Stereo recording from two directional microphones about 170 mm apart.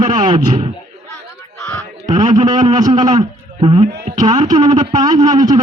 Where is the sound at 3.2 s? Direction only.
30° right (ahead or behind).